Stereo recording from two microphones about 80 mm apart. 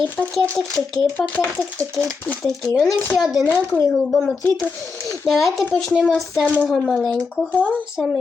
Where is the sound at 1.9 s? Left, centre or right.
Centre.